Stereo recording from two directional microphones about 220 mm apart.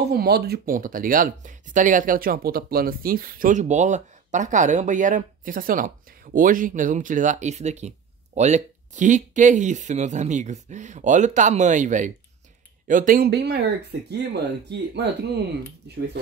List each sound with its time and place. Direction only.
0.1 s speech: 45° right (ahead or behind)